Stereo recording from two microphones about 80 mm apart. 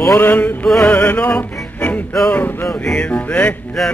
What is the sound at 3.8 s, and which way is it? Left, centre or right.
Music, centre.